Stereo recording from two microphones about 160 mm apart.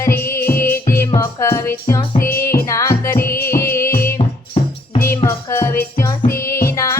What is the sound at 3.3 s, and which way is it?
Music, 70° left (ahead or behind).